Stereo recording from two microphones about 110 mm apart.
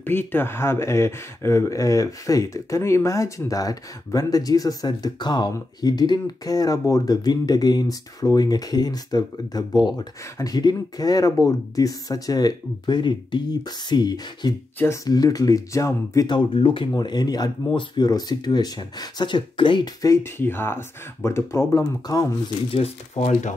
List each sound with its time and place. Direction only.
0.0 s speech: 20° left (ahead or behind)
16.3 s speech: 45° left (ahead or behind)
16.9 s speech: 40° left (ahead or behind)
20.0 s speech: 25° left (ahead or behind)
22.7 s speech: 70° left (ahead or behind)